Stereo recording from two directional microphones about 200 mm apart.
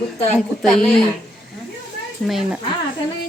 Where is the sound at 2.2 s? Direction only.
Centre (ahead or behind).